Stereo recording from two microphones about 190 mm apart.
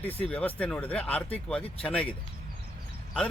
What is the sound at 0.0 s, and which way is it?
Speech, 10° left (ahead or behind).